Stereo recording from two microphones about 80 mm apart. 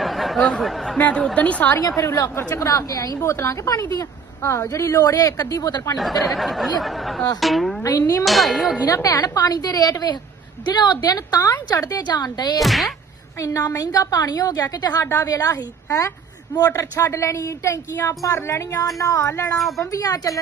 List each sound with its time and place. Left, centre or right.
0.0 s a sound: centre
0.9 s a woman's voice: left
2.0 s a woman's voice: left
3.2 s speech: left
3.7 s a woman's voice: left
4.4 s a woman's voice: left
6.0 s speech: centre
7.9 s a woman's voice: left
8.2 s speech: centre
8.8 s a woman's voice: left
12.5 s speech: centre
13.4 s a woman's voice: left
19.5 s speech: centre
19.8 s a woman's voice: left